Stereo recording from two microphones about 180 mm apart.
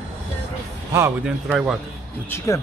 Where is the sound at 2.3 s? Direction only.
15° left (ahead or behind).